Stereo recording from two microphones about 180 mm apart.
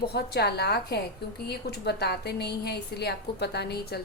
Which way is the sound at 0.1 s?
65° left (ahead or behind).